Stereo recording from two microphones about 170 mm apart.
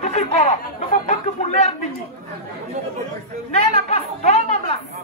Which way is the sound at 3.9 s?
40° left (ahead or behind).